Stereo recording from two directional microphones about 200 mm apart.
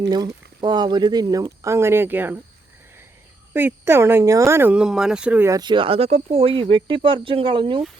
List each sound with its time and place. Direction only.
0.1 s speech: 20° right (ahead or behind)
3.5 s speech: 10° right (ahead or behind); by 7.9 s 25° right (ahead or behind)